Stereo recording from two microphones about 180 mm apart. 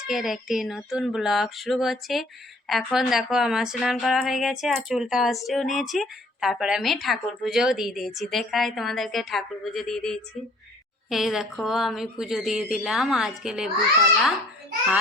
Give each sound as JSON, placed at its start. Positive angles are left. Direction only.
{"t": 0.1, "sound": "a woman's voice", "side_deg": 0}